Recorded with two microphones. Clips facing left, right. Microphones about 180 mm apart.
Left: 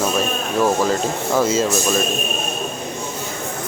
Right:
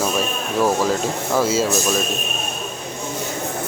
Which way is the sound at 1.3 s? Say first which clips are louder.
Left 1 dB; 10° right (ahead or behind).